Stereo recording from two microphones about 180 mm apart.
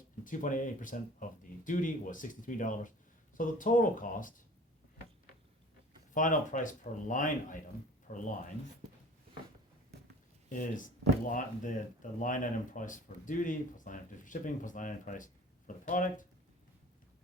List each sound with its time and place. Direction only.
0.3 s speech: 45° left (ahead or behind)
6.1 s speech: 45° left (ahead or behind)
10.5 s speech: 45° left (ahead or behind)